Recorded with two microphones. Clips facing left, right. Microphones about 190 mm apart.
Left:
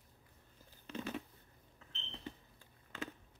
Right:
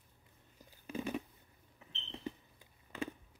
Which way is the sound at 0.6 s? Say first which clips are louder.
Right 3 dB; 10° right (ahead or behind).